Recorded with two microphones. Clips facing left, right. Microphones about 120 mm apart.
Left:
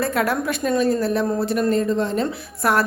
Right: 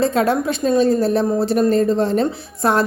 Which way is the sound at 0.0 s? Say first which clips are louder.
Right 4 dB; 25° right (ahead or behind).